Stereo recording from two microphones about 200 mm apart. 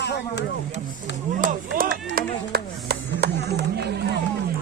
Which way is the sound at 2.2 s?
55° right (ahead or behind).